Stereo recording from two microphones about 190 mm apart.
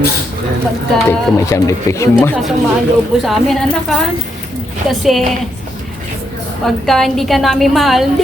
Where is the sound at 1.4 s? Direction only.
15° left (ahead or behind).